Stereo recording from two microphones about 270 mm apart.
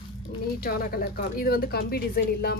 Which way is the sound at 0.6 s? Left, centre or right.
Left.